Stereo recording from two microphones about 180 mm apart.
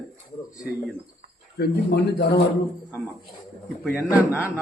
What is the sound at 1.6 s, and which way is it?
Speech, 65° left (ahead or behind).